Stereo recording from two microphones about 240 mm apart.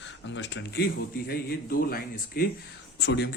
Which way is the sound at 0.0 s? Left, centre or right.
Left.